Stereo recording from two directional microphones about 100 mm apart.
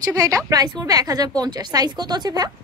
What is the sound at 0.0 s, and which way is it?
Speech, 40° right (ahead or behind).